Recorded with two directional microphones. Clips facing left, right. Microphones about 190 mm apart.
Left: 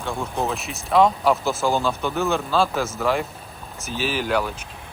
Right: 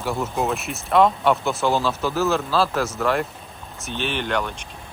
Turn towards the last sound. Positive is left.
turn(degrees=5)  # may be behind; listen again after turning